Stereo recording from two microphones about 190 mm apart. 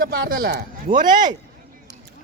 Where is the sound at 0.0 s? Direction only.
50° right (ahead or behind).